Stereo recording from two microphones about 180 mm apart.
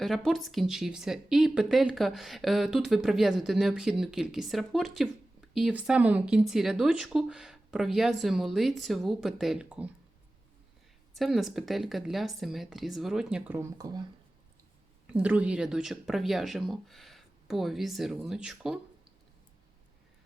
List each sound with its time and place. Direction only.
0.0 s speech: centre (ahead or behind)
11.1 s speech: centre (ahead or behind)
13.6 s speech: 20° right (ahead or behind)
15.0 s speech: 5° right (ahead or behind)